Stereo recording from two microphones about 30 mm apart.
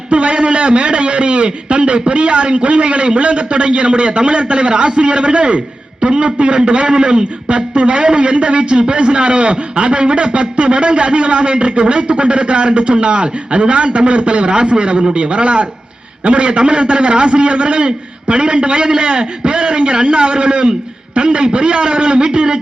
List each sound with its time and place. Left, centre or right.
0.1 s a man's voice: right